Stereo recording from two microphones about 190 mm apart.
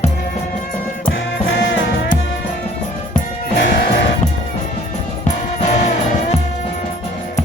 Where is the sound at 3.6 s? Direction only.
60° left (ahead or behind).